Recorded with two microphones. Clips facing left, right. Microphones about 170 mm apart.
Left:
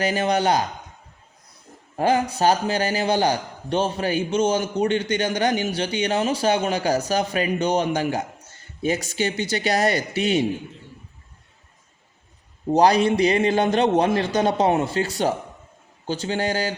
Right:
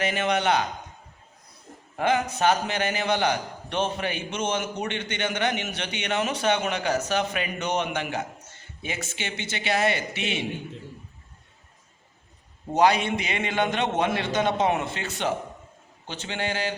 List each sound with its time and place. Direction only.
0.0 s a man's voice: 35° left (ahead or behind)
2.0 s a man's voice: 35° left (ahead or behind)
12.7 s a man's voice: 35° left (ahead or behind)